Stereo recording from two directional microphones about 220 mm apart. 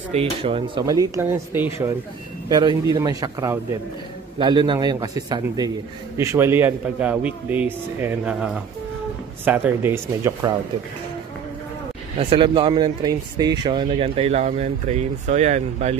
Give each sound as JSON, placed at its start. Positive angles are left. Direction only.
{"t": 0.1, "sound": "a man's voice", "side_deg": -25}
{"t": 12.2, "sound": "speech", "side_deg": -25}